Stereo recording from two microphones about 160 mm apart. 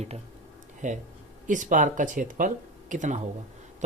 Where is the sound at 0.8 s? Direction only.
50° right (ahead or behind).